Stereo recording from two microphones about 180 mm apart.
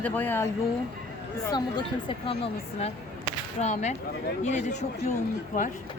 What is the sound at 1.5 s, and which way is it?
Speech, 25° left (ahead or behind).